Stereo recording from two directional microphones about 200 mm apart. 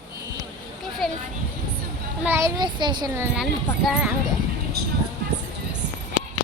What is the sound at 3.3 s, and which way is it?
Speech, 5° right (ahead or behind).